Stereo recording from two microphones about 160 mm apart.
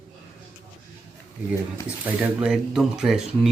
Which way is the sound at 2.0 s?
5° right (ahead or behind).